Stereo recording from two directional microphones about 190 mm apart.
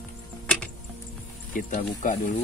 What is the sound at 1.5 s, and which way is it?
Speech, 40° left (ahead or behind).